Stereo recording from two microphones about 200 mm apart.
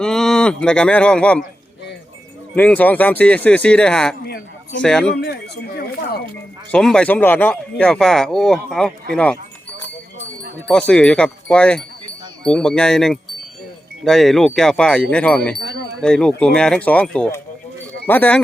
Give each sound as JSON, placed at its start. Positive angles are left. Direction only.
{"t": 0.0, "sound": "speech", "side_deg": 0}
{"t": 2.6, "sound": "speech", "side_deg": 5}
{"t": 4.2, "sound": "a sound", "side_deg": 55}
{"t": 4.8, "sound": "speech", "side_deg": 5}
{"t": 5.1, "sound": "speech", "side_deg": 55}
{"t": 6.7, "sound": "speech", "side_deg": 5}
{"t": 10.7, "sound": "speech", "side_deg": 5}